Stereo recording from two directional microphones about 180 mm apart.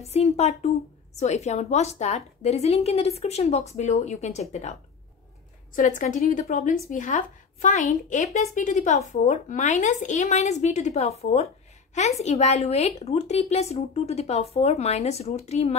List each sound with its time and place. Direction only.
0.0 s a woman's voice: 35° left (ahead or behind)
5.8 s a woman's voice: 45° left (ahead or behind)